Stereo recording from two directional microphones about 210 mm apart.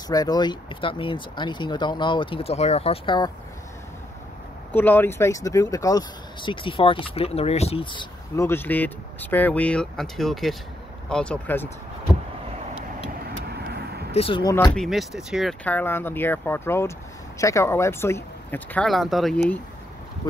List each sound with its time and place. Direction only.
0.1 s speech: 20° left (ahead or behind)
4.7 s speech: 10° left (ahead or behind)
13.5 s vehicle: 50° right (ahead or behind)
14.1 s speech: 25° left (ahead or behind)
14.8 s speech: centre (ahead or behind)